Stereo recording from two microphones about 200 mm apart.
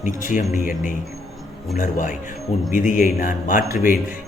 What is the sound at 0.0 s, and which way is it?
Speech, 40° left (ahead or behind).